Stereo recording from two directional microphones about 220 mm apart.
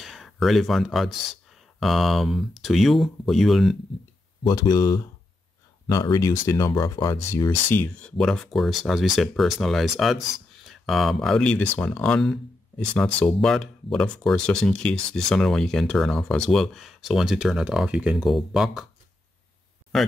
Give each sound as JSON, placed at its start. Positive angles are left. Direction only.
{"t": 0.0, "sound": "speech", "side_deg": 0}
{"t": 4.5, "sound": "speech", "side_deg": 15}
{"t": 19.9, "sound": "speech", "side_deg": 0}